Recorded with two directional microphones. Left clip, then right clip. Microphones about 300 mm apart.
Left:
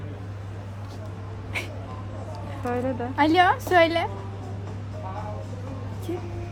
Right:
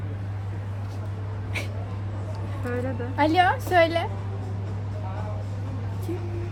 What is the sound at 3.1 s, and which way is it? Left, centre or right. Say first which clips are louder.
Speech: left 1 dB; centre.